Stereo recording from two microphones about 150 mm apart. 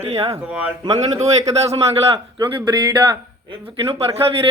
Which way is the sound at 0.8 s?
25° right (ahead or behind).